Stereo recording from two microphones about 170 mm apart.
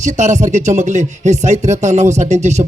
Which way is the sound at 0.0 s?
45° right (ahead or behind).